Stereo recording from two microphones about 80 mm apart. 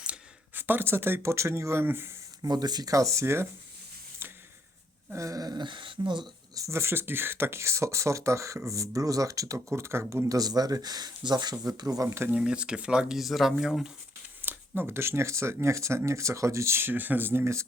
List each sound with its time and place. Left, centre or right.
0.5 s speech: right
2.4 s speech: right
4.2 s a sound: right
5.1 s speech: right
6.5 s speech: right
10.2 s speech: right
11.5 s speech: right
12.3 s speech: centre
14.4 s speech: right